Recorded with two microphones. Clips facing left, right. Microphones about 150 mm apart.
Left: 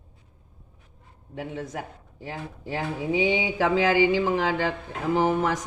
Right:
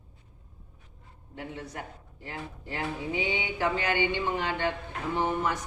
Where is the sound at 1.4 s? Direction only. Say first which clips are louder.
Left 6 dB; 90° left.